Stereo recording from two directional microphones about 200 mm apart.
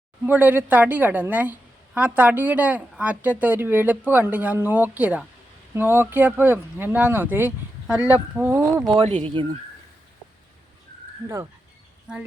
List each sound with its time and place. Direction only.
0.3 s a woman's voice: 10° right (ahead or behind)
8.9 s speech: 30° right (ahead or behind)
12.1 s speech: 5° right (ahead or behind)